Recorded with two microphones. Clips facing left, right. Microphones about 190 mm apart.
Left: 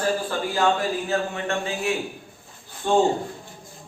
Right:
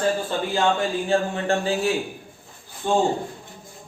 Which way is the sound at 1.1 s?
35° right (ahead or behind).